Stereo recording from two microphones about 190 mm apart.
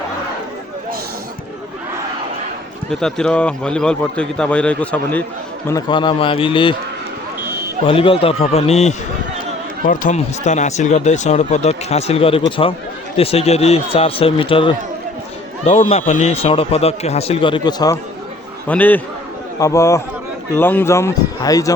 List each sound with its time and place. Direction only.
2.9 s a man's voice: 5° left (ahead or behind)
5.6 s a man's voice: 20° left (ahead or behind)
7.9 s a man's voice: 30° left (ahead or behind)
18.7 s speech: 10° left (ahead or behind)